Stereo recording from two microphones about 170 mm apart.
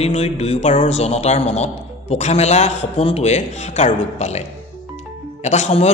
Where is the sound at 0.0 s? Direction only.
40° left (ahead or behind).